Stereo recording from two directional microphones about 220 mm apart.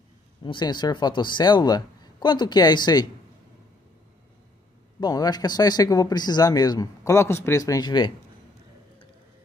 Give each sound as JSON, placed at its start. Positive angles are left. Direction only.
{"t": 0.4, "sound": "speech", "side_deg": 20}
{"t": 5.0, "sound": "speech", "side_deg": 20}